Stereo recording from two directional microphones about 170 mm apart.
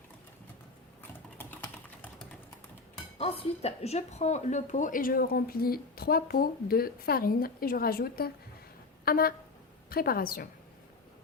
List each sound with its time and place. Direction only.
1.4 s typing: 10° left (ahead or behind)
3.2 s a woman's voice: 35° left (ahead or behind); by 10.5 s 60° left (ahead or behind)